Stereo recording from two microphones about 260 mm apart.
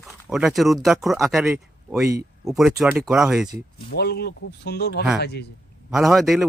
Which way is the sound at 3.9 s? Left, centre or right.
Left.